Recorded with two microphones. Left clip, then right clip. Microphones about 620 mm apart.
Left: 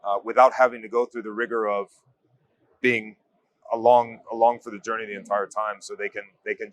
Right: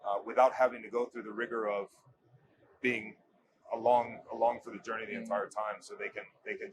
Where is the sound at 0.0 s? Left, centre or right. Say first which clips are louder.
Left 10 dB; left.